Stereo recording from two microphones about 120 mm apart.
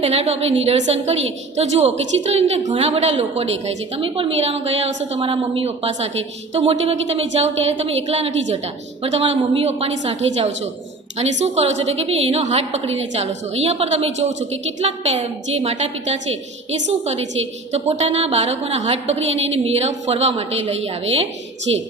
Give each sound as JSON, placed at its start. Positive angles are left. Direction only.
{"t": 0.0, "sound": "a woman's voice", "side_deg": -60}
{"t": 17.7, "sound": "a woman's voice", "side_deg": -65}